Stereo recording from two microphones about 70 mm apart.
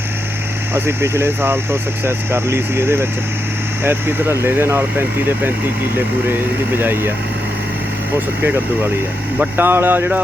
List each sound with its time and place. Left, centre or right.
0.7 s speech: right
6.7 s speech: right
9.6 s speech: right